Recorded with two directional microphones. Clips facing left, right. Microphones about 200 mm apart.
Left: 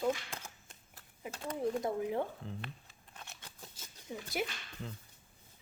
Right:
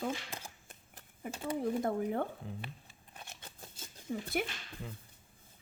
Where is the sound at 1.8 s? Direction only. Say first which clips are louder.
Right 1 dB; 55° right (ahead or behind).